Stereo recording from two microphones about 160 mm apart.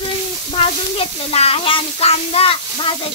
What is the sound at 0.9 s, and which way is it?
Speech, 40° left (ahead or behind).